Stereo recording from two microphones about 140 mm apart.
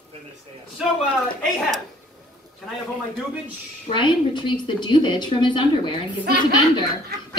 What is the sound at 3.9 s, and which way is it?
A woman's voice, 35° left (ahead or behind).